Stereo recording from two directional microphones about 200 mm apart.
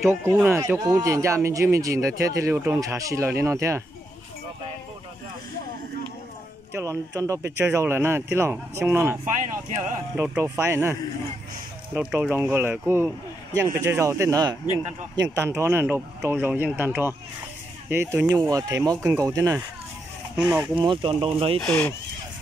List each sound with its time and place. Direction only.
0.0 s speech: 15° right (ahead or behind)
6.7 s speech: 15° right (ahead or behind)
9.2 s speech: 40° right (ahead or behind)
10.1 s speech: 10° right (ahead or behind)
20.4 s speech: 5° right (ahead or behind)
20.7 s speech: 25° right (ahead or behind)
21.5 s speech: 5° left (ahead or behind)